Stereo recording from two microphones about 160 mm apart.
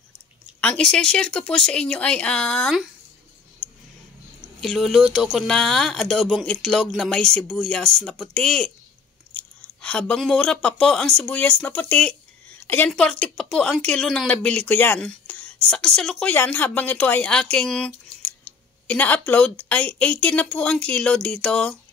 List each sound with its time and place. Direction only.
0.6 s speech: 5° left (ahead or behind)
3.6 s a sound: 40° right (ahead or behind)
4.6 s speech: centre (ahead or behind)